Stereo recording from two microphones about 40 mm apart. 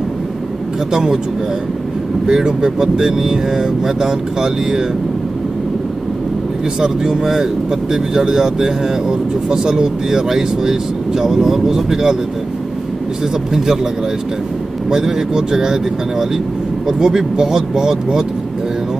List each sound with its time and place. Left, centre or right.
0.9 s speech: centre
2.2 s speech: centre
6.8 s speech: centre
13.2 s speech: centre
14.9 s speech: centre